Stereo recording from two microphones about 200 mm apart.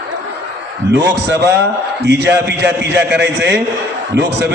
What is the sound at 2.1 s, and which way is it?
A man's voice, 55° right (ahead or behind).